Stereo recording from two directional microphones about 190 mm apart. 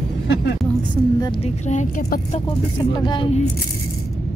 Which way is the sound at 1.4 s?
40° left (ahead or behind).